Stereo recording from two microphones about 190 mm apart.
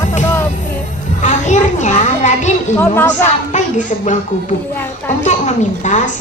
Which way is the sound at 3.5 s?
40° left (ahead or behind).